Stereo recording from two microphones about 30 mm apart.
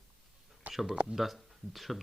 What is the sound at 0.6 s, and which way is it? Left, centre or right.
Speech, right.